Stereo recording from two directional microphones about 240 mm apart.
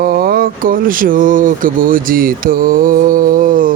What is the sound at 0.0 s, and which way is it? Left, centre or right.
Speech, right.